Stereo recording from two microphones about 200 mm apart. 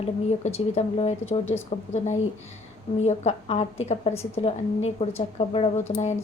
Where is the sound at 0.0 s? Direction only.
30° left (ahead or behind).